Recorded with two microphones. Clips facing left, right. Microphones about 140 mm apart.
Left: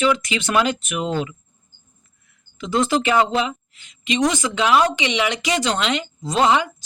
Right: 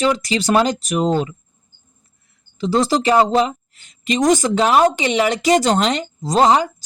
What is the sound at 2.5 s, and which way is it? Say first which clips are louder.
A woman's voice: right 3 dB; 35° right (ahead or behind).